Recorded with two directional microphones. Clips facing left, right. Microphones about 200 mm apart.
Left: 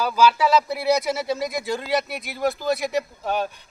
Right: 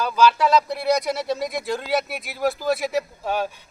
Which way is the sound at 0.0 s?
5° left (ahead or behind).